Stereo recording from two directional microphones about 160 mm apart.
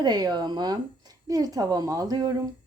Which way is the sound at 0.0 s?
25° right (ahead or behind).